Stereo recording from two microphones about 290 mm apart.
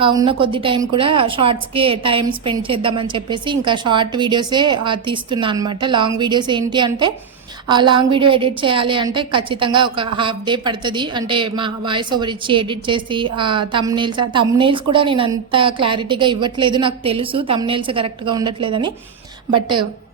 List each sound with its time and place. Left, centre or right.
0.0 s a woman's voice: centre